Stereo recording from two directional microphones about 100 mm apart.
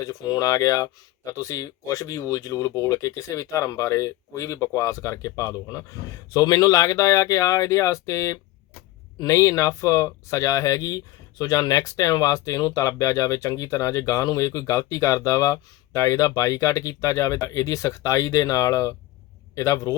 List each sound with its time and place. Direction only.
0.0 s speech: 35° left (ahead or behind)